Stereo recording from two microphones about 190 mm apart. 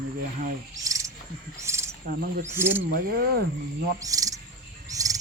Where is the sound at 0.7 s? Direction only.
15° right (ahead or behind).